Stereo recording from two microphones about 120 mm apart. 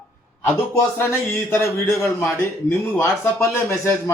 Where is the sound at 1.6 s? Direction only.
25° left (ahead or behind).